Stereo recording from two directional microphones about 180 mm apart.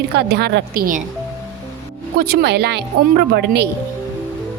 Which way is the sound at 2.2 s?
60° right (ahead or behind).